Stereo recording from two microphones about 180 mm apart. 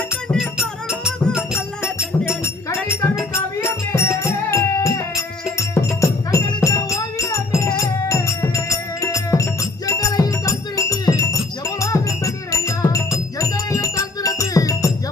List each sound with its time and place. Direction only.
0.3 s music: 5° right (ahead or behind)
2.4 s music: 15° left (ahead or behind)